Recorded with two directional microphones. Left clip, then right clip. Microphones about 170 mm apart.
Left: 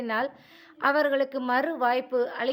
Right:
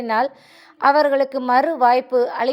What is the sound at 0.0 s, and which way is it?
A woman's voice, 20° right (ahead or behind).